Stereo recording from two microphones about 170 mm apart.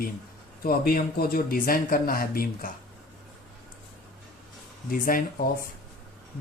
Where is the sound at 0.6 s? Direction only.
60° left (ahead or behind).